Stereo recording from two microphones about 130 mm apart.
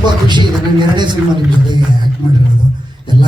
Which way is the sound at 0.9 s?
35° right (ahead or behind).